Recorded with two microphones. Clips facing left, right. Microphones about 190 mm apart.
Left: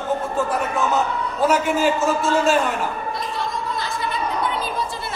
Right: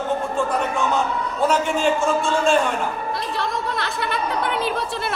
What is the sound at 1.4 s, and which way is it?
A man's voice, 5° left (ahead or behind).